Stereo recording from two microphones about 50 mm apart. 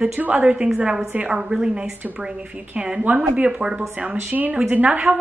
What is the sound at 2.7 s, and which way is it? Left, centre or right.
A woman's voice, right.